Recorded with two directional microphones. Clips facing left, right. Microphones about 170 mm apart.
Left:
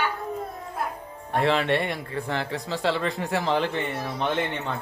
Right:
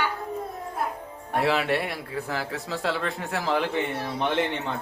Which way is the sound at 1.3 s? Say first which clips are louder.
Left 1 dB; 5° right (ahead or behind).